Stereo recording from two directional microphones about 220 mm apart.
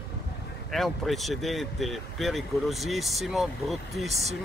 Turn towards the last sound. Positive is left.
turn(degrees=0)  # may be behind; listen again after turning